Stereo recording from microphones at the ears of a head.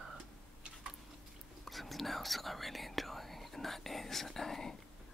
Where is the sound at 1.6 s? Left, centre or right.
Centre.